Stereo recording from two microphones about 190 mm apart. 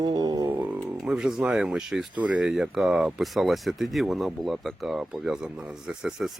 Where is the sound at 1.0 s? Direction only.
5° right (ahead or behind).